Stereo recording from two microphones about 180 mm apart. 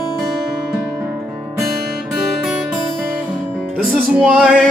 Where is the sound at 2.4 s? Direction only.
5° right (ahead or behind).